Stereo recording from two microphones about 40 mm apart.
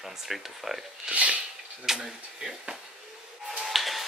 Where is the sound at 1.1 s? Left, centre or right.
Right.